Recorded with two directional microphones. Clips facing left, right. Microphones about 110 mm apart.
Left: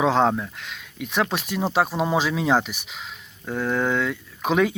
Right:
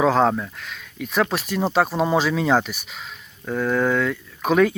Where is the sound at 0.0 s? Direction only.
20° left (ahead or behind).